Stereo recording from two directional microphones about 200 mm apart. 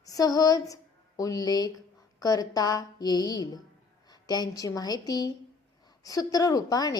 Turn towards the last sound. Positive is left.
turn(degrees=20)  # may be behind; listen again after turning